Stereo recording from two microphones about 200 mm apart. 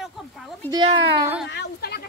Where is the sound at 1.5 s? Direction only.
55° left (ahead or behind).